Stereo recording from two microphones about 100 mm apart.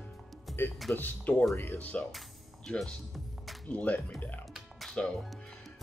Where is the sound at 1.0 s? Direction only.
20° left (ahead or behind).